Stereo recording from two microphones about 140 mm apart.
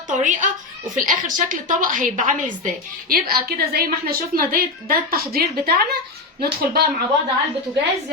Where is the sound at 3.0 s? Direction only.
90° right.